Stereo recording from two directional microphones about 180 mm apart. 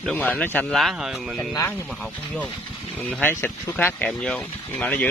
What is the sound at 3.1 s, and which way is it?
Speech, 10° left (ahead or behind).